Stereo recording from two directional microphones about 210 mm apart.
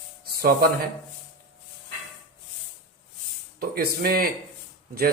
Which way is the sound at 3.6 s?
45° right (ahead or behind).